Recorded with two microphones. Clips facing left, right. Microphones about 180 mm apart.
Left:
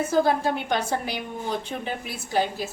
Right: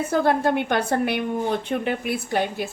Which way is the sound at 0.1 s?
60° right (ahead or behind).